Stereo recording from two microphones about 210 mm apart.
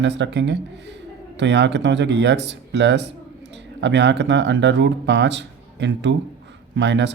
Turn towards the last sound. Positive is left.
turn(degrees=-55)  # may be behind; listen again after turning